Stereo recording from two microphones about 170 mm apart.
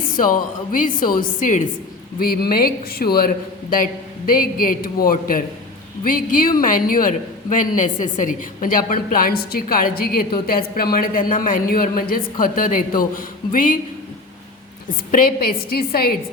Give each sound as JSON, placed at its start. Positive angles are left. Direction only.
{"t": 0.2, "sound": "a woman's voice", "side_deg": 55}
{"t": 2.1, "sound": "a woman's voice", "side_deg": 60}
{"t": 15.1, "sound": "a woman's voice", "side_deg": 60}